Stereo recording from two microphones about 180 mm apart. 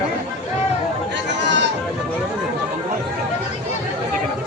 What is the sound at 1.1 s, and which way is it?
Chatter, 80° right.